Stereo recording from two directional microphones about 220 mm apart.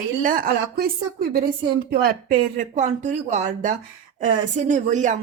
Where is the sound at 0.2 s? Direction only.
40° right (ahead or behind).